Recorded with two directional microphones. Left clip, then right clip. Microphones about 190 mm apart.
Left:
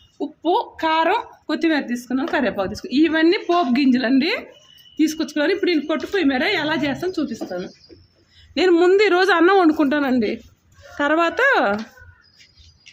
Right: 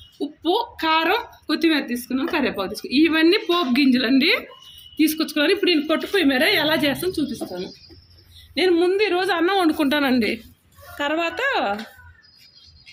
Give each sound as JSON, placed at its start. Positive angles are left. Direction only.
{"t": 0.2, "sound": "a woman's voice", "side_deg": 45}
{"t": 8.5, "sound": "speech", "side_deg": 45}
{"t": 10.9, "sound": "speech", "side_deg": 35}